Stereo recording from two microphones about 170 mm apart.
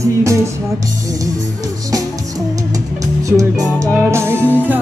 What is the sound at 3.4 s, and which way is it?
Music, 20° right (ahead or behind).